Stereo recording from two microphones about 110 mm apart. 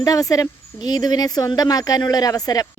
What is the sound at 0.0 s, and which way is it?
Speech, 30° left (ahead or behind).